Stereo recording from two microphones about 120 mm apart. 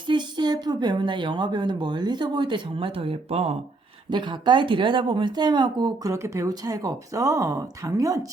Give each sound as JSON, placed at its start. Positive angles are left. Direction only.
{"t": 0.1, "sound": "speech", "side_deg": -40}
{"t": 4.1, "sound": "speech", "side_deg": -40}